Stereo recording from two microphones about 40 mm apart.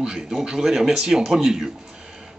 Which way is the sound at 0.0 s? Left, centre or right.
Right.